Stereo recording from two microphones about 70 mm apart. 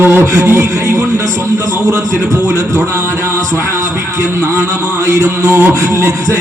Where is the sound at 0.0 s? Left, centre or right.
Right.